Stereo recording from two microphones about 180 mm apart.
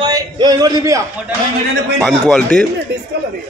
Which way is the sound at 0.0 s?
20° right (ahead or behind).